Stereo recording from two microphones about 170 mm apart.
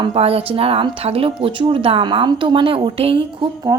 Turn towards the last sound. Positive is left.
turn(degrees=-20)  # may be behind; listen again after turning